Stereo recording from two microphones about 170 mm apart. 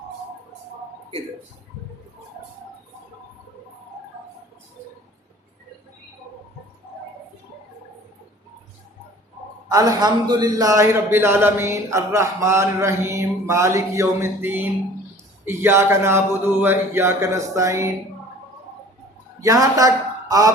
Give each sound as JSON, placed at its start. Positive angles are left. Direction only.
{"t": 9.6, "sound": "a man's voice", "side_deg": -20}
{"t": 19.4, "sound": "speech", "side_deg": -20}